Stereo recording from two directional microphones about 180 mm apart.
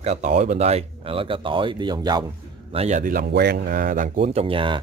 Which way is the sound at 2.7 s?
35° right (ahead or behind).